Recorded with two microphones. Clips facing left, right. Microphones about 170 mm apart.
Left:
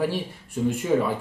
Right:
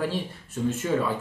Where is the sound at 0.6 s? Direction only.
15° left (ahead or behind).